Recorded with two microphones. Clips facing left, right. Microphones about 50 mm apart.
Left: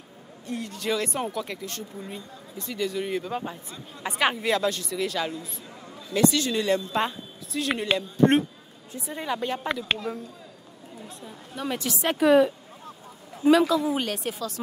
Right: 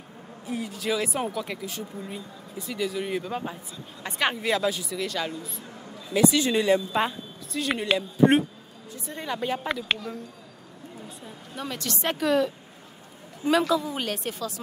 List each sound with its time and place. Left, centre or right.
0.5 s speech: centre
6.3 s a woman's voice: centre
11.6 s a woman's voice: centre
11.9 s speech: centre
12.2 s speech: centre
13.5 s speech: centre